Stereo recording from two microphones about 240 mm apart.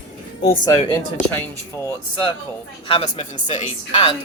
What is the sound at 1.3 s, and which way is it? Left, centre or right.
Speech, centre.